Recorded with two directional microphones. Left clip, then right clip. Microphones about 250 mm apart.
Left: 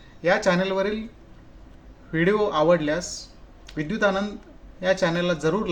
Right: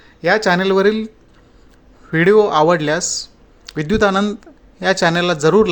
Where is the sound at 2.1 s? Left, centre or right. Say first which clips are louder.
Right 10 dB; right.